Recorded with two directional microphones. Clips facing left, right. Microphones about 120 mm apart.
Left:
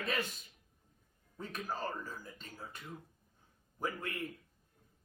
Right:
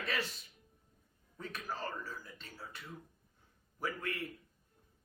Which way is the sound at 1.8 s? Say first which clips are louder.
Left 1 dB; 20° left (ahead or behind).